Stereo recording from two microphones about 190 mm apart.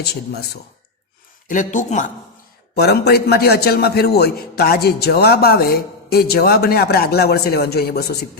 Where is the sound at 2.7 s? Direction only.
55° left (ahead or behind).